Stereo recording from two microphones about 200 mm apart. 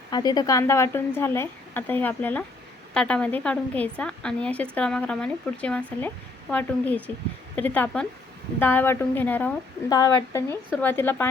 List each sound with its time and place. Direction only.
0.1 s a woman's voice: 20° left (ahead or behind)
9.9 s a woman's voice: 20° left (ahead or behind)